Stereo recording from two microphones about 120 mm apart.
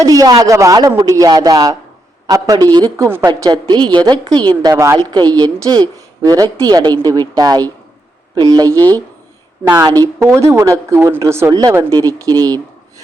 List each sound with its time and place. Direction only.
0.0 s a woman's voice: 30° right (ahead or behind)
3.1 s a woman's voice: 25° right (ahead or behind)
4.7 s speech: 20° right (ahead or behind)
4.9 s a woman's voice: 35° right (ahead or behind)